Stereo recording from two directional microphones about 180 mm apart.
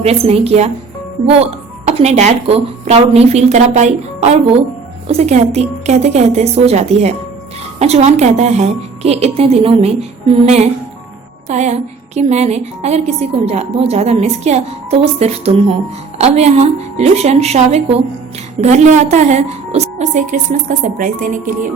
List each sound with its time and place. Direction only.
0.0 s a woman's voice: 35° right (ahead or behind)
2.0 s a woman's voice: 35° right (ahead or behind)